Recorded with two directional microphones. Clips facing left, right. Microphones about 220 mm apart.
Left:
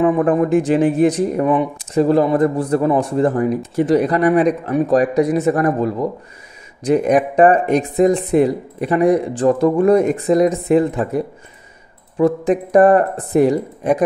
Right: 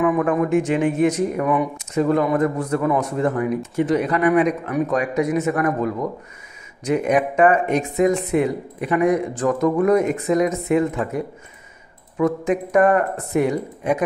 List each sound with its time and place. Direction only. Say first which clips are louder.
0.0 s speech: left 4 dB; 30° left (ahead or behind)